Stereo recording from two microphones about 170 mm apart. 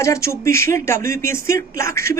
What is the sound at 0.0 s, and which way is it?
Speech, 15° left (ahead or behind).